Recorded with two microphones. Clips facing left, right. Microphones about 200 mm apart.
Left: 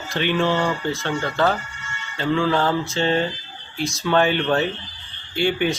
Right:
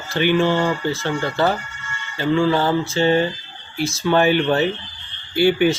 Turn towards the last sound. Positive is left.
turn(degrees=-5)  # may be behind; listen again after turning